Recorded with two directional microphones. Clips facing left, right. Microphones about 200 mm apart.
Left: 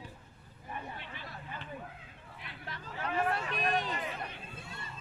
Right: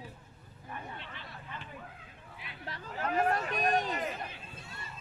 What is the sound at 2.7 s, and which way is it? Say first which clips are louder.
Hubbub: right 3 dB; 40° right (ahead or behind).